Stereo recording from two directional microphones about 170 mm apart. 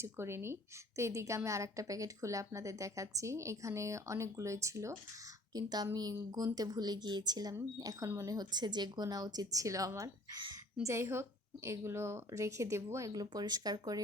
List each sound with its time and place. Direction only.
0.0 s a woman's voice: 15° right (ahead or behind)